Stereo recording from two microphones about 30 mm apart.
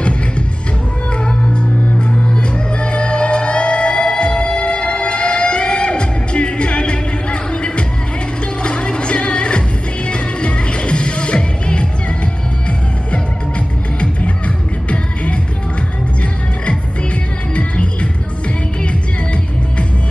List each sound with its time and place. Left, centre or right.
1.2 s music: left